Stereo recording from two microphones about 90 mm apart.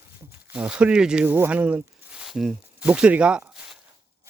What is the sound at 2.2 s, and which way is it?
Speech, 5° right (ahead or behind).